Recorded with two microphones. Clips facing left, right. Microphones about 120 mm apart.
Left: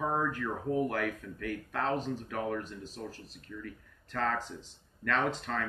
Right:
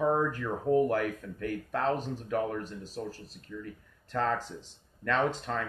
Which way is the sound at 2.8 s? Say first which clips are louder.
Right 4 dB; 35° right (ahead or behind).